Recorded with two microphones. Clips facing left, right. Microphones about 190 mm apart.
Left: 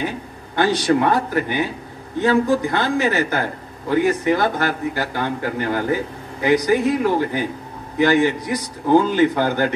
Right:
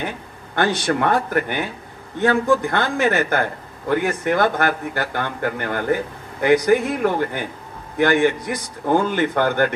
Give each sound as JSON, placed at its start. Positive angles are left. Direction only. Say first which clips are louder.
{"t": 0.6, "sound": "speech", "louder": "left 3 dB", "side_deg": -55}